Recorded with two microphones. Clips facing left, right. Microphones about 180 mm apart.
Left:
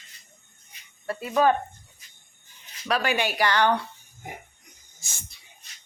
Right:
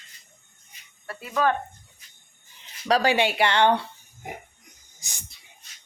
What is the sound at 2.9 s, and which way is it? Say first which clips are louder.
Speech: right 4 dB; 35° right (ahead or behind).